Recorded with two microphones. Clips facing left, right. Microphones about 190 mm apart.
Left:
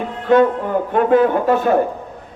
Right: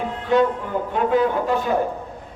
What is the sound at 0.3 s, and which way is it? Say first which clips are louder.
A man's voice: left 6 dB; 55° left (ahead or behind).